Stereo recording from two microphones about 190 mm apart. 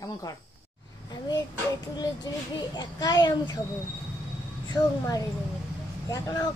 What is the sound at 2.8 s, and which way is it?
Speech, 20° left (ahead or behind).